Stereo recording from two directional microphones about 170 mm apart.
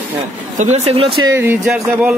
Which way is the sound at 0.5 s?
40° right (ahead or behind).